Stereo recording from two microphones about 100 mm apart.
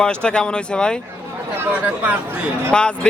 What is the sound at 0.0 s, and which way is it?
Speech, 10° left (ahead or behind).